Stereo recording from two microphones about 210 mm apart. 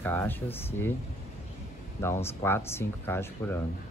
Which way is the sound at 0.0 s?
10° left (ahead or behind).